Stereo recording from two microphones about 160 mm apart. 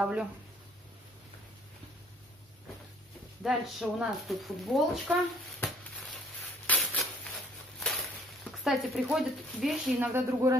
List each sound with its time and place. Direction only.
0.0 s speech: 5° right (ahead or behind)
3.4 s speech: centre (ahead or behind)
6.7 s a sound: 10° left (ahead or behind)
8.5 s speech: centre (ahead or behind)
10.1 s speech: 20° right (ahead or behind)